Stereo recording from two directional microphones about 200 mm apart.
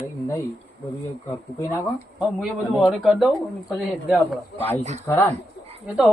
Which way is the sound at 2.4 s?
Centre (ahead or behind).